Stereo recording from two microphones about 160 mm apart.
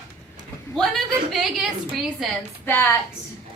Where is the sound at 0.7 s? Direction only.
Centre (ahead or behind).